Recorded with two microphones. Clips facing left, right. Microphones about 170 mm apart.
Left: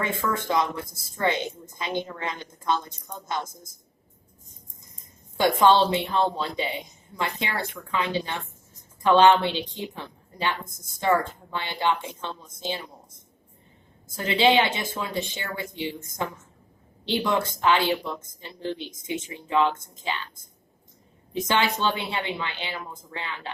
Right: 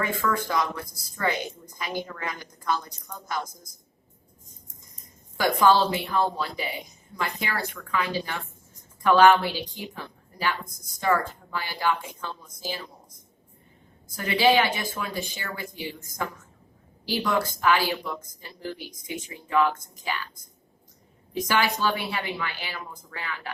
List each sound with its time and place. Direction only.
0.0 s a woman's voice: 25° left (ahead or behind)
5.4 s a woman's voice: 25° left (ahead or behind)